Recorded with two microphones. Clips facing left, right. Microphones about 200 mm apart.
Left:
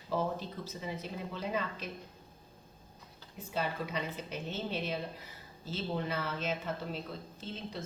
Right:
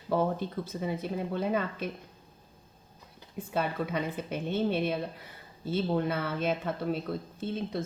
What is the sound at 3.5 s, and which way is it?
A woman's voice, 55° right (ahead or behind).